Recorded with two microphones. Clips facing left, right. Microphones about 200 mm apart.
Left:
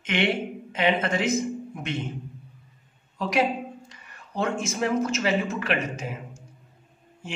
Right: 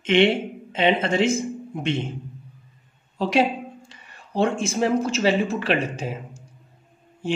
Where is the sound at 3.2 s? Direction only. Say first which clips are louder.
Right 4 dB; 30° right (ahead or behind).